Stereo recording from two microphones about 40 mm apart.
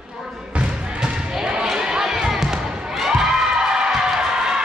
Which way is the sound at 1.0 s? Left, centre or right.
Centre.